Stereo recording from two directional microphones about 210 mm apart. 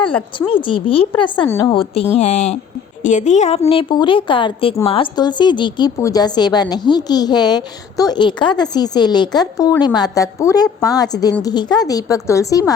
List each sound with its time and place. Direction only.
0.0 s a woman's voice: 25° left (ahead or behind)
1.5 s a woman's voice: 10° left (ahead or behind)
1.7 s speech: 25° left (ahead or behind)
3.7 s a woman's voice: 25° left (ahead or behind)